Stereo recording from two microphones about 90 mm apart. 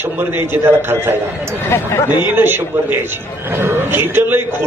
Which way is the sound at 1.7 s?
30° left (ahead or behind).